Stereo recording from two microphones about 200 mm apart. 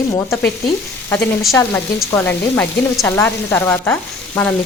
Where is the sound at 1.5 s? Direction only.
15° left (ahead or behind).